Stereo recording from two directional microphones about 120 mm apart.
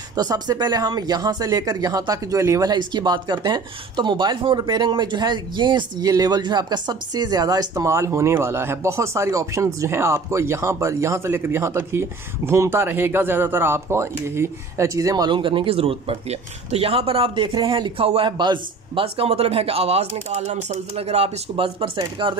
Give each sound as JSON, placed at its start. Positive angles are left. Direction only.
{"t": 0.1, "sound": "speech", "side_deg": -35}